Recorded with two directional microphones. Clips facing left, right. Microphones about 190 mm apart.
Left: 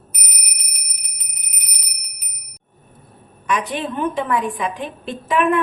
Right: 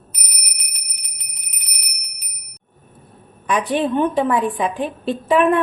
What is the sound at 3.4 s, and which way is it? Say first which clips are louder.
A woman's voice: right 4 dB; 35° right (ahead or behind).